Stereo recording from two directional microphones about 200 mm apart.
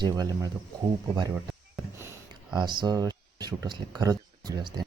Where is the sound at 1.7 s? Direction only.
10° right (ahead or behind).